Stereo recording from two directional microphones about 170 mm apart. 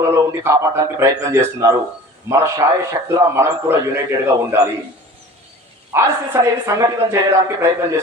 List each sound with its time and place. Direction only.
0.0 s speech: 15° right (ahead or behind)
5.9 s speech: 15° right (ahead or behind)